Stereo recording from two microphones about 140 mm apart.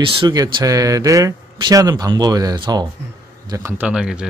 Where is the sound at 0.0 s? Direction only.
40° right (ahead or behind).